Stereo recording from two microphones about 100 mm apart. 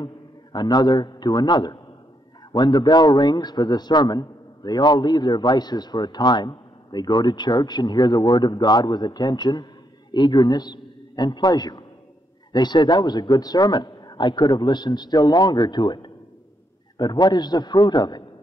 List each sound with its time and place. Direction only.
0.0 s a man's voice: 45° left (ahead or behind)